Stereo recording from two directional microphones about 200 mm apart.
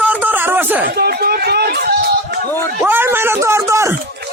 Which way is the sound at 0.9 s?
50° right (ahead or behind).